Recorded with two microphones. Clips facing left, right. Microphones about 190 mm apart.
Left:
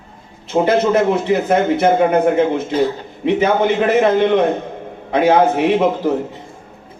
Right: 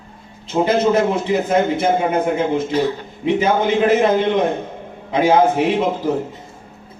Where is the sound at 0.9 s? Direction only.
60° left (ahead or behind).